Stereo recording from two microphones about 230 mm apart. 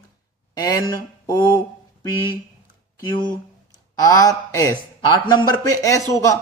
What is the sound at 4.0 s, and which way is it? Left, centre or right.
Speech, centre.